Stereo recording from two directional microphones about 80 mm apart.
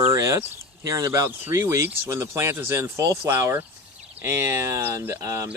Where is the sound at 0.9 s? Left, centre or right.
Right.